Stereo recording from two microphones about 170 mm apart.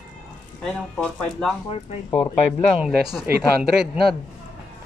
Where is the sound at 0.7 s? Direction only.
5° left (ahead or behind).